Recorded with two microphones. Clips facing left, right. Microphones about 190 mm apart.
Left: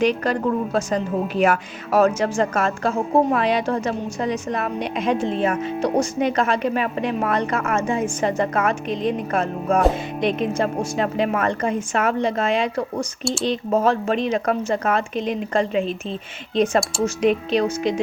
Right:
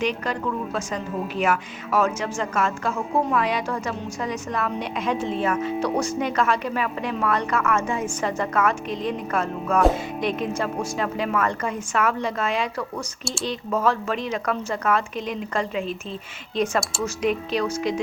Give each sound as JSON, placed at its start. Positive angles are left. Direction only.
{"t": 0.0, "sound": "a woman's voice", "side_deg": 35}